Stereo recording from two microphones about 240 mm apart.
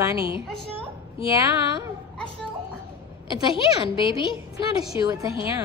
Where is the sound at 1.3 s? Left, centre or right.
Centre.